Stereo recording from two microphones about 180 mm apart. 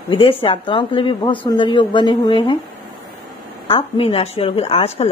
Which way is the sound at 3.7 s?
30° left (ahead or behind).